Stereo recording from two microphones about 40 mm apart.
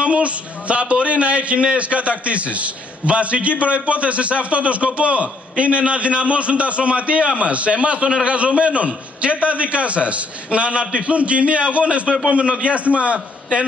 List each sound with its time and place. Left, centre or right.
0.0 s a man's voice: right